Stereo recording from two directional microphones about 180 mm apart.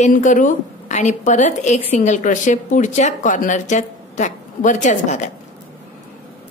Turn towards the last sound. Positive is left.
turn(degrees=40)  # may be behind; listen again after turning